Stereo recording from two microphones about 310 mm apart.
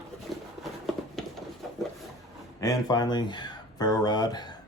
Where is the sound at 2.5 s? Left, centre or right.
Centre.